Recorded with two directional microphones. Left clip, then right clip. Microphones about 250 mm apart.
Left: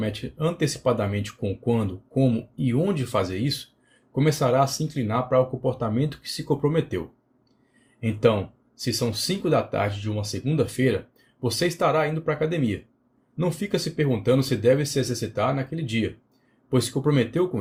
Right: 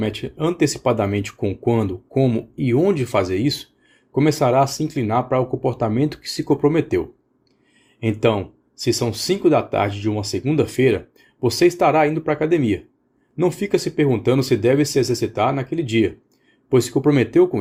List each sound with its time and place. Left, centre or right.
0.0 s speech: right
8.0 s speech: right